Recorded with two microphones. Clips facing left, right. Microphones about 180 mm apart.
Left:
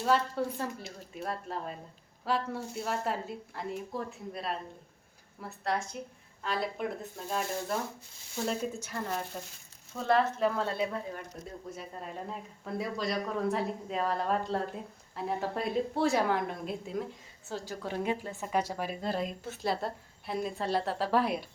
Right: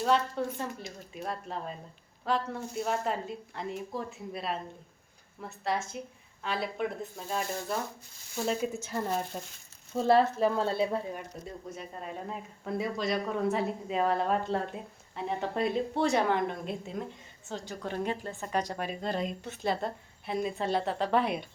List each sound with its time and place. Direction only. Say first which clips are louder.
0.0 s speech: right 1 dB; 5° left (ahead or behind)
8.7 s speech: right 4 dB; 25° right (ahead or behind)
11.7 s speech: right 1 dB; centre (ahead or behind)